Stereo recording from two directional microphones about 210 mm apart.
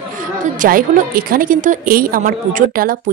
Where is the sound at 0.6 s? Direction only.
40° right (ahead or behind).